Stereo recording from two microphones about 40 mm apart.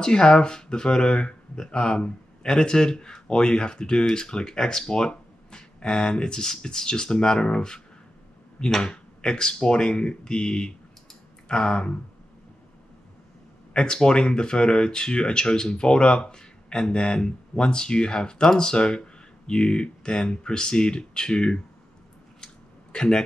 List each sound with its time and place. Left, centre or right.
0.0 s speech: centre
13.7 s speech: centre
22.9 s speech: left